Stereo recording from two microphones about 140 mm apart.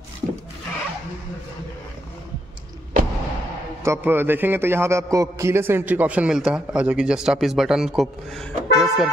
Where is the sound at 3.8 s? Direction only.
15° right (ahead or behind).